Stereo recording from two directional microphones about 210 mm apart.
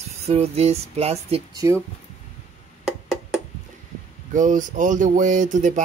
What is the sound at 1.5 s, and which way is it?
Speech, 15° right (ahead or behind).